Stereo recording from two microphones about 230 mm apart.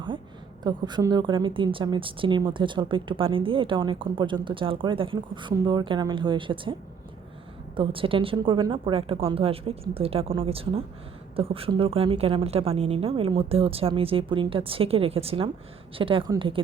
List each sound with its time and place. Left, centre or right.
0.6 s a woman's voice: centre
7.8 s a woman's voice: right